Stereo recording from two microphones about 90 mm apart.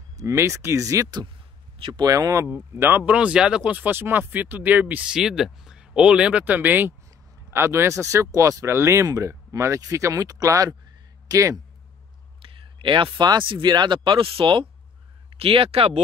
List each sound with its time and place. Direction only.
0.2 s speech: 30° right (ahead or behind)
2.7 s speech: 25° right (ahead or behind)
3.1 s speech: 15° right (ahead or behind); by 11.6 s 40° right (ahead or behind)
12.4 s speech: 75° right (ahead or behind)
15.2 s speech: 90° right